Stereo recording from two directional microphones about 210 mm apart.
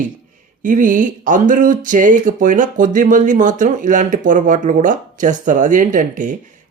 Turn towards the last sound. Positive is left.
turn(degrees=-40)  # may be behind; listen again after turning